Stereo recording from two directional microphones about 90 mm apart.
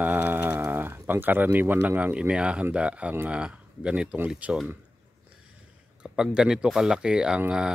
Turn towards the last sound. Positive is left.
turn(degrees=-10)  # may be behind; listen again after turning